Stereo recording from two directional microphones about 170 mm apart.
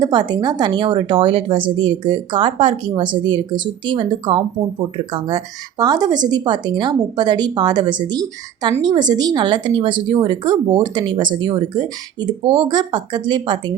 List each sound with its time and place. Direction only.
0.0 s speech: 25° right (ahead or behind)